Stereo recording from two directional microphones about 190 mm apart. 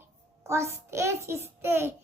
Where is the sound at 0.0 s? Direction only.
15° right (ahead or behind).